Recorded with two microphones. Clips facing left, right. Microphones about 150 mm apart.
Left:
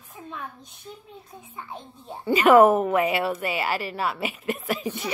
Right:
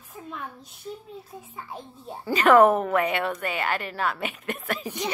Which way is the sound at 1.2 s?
5° right (ahead or behind).